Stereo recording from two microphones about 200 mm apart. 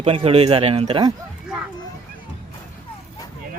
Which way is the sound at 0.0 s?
30° right (ahead or behind).